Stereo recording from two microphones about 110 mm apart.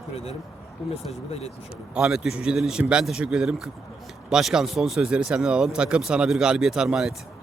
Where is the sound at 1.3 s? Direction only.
70° left (ahead or behind).